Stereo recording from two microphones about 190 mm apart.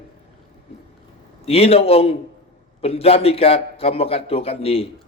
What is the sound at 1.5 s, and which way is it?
A man's voice, 30° left (ahead or behind).